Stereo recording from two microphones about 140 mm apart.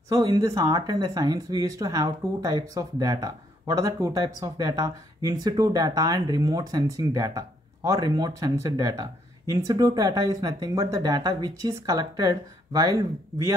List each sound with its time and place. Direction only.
0.1 s speech: 25° right (ahead or behind)